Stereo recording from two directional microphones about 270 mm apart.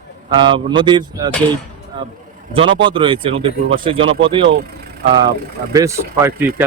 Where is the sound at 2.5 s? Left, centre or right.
Centre.